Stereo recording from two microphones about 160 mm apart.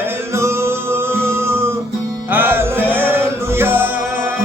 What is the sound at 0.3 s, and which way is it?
Music, 15° right (ahead or behind).